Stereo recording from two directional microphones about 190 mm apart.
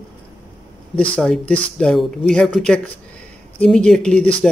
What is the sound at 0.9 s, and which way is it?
Speech, 5° left (ahead or behind).